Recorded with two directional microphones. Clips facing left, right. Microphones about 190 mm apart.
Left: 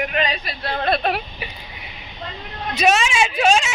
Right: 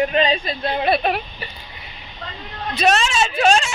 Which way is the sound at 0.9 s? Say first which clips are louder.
Right 1 dB; 5° right (ahead or behind).